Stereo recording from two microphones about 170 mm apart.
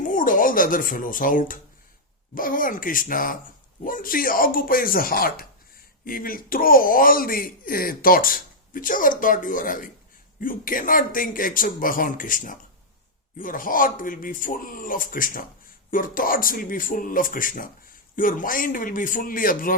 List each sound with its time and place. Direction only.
0.0 s speech: 50° left (ahead or behind)